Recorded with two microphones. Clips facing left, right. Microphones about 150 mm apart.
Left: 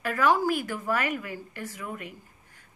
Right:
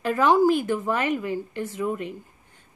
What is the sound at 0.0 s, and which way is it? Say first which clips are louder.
A woman's voice: right 5 dB; 25° right (ahead or behind).